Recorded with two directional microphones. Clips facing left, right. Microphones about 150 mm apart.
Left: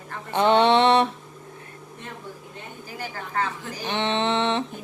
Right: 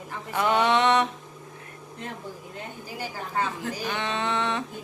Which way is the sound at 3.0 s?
15° right (ahead or behind).